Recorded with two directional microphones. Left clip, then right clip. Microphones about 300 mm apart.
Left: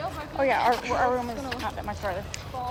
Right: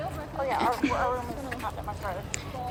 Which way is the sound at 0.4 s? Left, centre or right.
Left.